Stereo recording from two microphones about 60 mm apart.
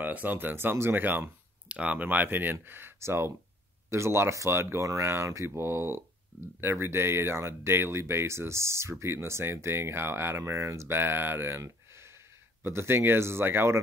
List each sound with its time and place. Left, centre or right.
0.0 s speech: right
1.7 s speech: right
4.8 s speech: right
11.6 s a sound: right
12.6 s speech: right